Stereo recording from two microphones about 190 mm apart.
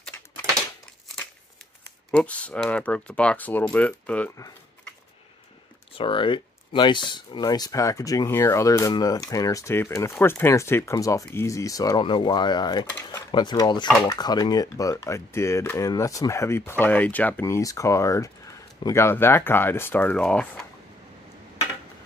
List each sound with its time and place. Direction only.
2.0 s speech: 5° left (ahead or behind)
5.9 s speech: 25° left (ahead or behind); by 20.6 s 5° left (ahead or behind)